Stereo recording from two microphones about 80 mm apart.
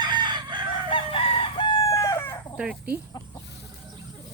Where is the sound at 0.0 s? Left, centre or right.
Right.